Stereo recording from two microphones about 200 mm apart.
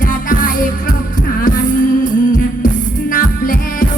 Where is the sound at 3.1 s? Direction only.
45° left (ahead or behind).